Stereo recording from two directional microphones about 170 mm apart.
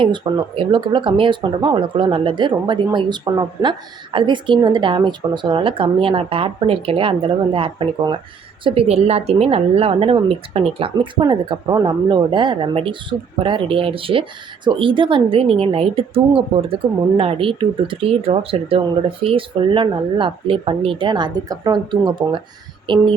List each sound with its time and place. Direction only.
0.0 s a woman's voice: 30° right (ahead or behind)